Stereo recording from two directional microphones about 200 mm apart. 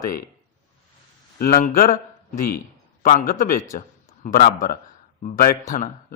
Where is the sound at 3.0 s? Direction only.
40° left (ahead or behind).